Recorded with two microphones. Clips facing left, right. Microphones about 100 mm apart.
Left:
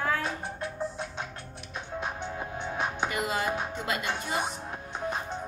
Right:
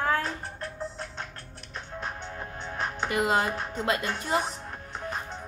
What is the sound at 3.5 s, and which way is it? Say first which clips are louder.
Speech: left 1 dB; 10° left (ahead or behind).